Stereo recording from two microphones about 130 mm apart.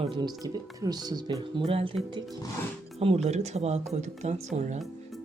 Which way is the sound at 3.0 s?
50° right (ahead or behind).